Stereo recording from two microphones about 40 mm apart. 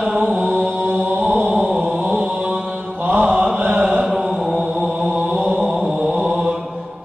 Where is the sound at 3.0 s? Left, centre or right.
Right.